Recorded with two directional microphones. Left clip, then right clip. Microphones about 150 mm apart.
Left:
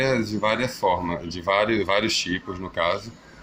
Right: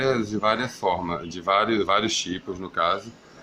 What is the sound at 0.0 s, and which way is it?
Speech, 30° right (ahead or behind).